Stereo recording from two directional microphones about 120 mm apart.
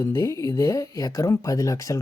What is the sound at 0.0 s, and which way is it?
Speech, 25° left (ahead or behind).